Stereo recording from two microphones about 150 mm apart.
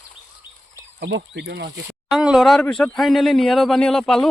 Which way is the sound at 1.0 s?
90° right.